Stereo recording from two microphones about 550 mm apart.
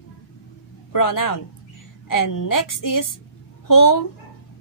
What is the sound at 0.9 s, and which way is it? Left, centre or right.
A woman's voice, left.